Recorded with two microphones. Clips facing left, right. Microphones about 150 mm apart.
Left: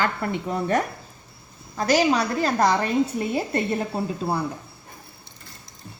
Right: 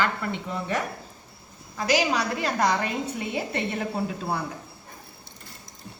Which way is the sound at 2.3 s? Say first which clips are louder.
Left 4 dB; 35° left (ahead or behind).